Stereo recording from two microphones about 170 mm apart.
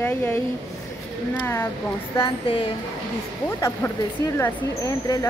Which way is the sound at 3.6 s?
20° left (ahead or behind).